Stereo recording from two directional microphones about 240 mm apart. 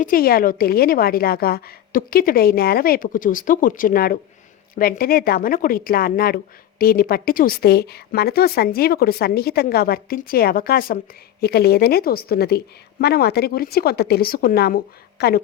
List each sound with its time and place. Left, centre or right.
0.0 s a woman's voice: left